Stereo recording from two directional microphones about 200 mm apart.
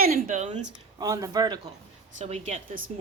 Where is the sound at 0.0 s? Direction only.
45° right (ahead or behind).